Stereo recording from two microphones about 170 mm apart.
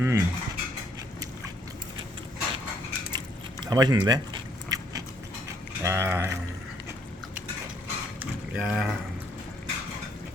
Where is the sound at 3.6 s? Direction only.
25° right (ahead or behind).